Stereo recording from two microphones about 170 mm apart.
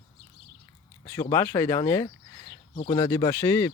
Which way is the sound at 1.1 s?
20° left (ahead or behind).